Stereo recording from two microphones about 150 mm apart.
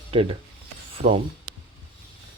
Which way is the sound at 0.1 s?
40° right (ahead or behind).